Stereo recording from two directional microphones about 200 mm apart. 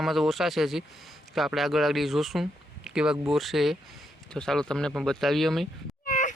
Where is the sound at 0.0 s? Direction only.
Centre (ahead or behind).